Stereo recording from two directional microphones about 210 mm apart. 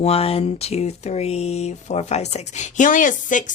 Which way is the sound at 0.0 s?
30° left (ahead or behind).